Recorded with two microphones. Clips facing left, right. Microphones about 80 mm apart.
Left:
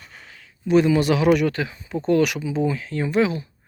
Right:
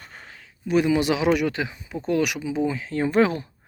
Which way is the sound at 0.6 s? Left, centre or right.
Centre.